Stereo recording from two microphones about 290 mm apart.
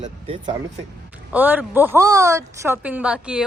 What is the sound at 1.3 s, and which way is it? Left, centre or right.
A woman's voice, centre.